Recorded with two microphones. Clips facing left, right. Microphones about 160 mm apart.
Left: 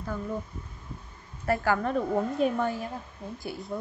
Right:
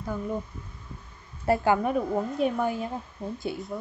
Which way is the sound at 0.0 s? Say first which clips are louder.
Right 2 dB; 10° right (ahead or behind).